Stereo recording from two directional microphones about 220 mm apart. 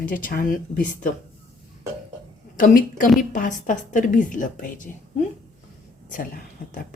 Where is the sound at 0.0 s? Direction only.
40° left (ahead or behind).